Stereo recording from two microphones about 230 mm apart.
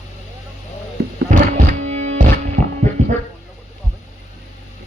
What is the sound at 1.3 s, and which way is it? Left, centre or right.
Music, right.